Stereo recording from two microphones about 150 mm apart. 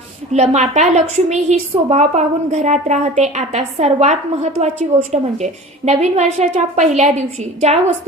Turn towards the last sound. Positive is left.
turn(degrees=-50)  # may be behind; listen again after turning